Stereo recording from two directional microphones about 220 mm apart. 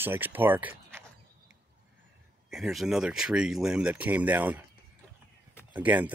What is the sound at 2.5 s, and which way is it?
Speech, centre (ahead or behind).